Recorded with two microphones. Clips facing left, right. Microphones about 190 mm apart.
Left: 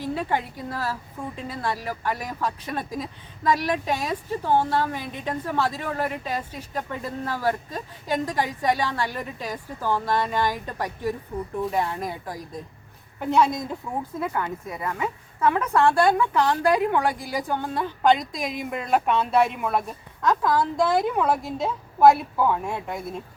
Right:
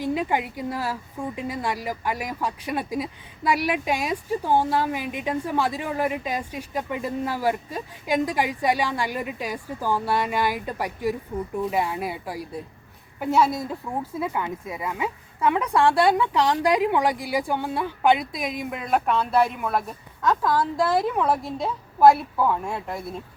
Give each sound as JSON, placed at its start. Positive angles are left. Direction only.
{"t": 0.0, "sound": "a woman's voice", "side_deg": -15}